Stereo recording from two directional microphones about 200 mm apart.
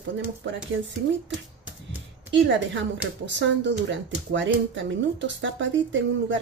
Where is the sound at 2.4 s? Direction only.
65° right (ahead or behind).